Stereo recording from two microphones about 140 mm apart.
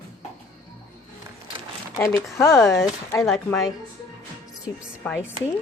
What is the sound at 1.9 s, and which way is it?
Speech, 20° left (ahead or behind).